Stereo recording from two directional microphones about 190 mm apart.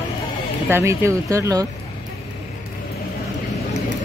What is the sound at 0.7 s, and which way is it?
Speech, 15° right (ahead or behind).